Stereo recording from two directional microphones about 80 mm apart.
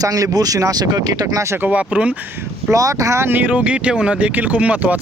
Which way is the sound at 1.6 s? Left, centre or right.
Centre.